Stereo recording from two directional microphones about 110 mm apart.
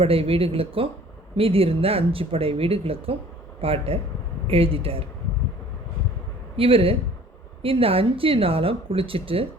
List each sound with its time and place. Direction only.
0.0 s speech: 60° right (ahead or behind)
6.6 s speech: 55° right (ahead or behind)